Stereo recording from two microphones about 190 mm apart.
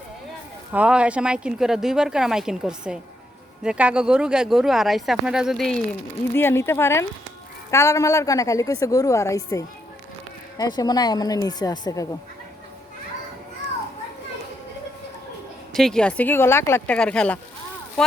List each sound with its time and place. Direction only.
0.7 s speech: 5° right (ahead or behind)
6.3 s a woman's voice: 10° left (ahead or behind)
15.7 s a woman's voice: 5° left (ahead or behind)